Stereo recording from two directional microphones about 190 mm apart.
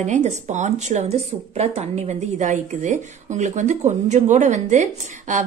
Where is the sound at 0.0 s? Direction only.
40° right (ahead or behind).